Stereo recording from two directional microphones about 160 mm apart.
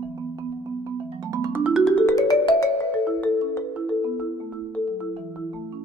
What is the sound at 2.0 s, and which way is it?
Music, 20° left (ahead or behind).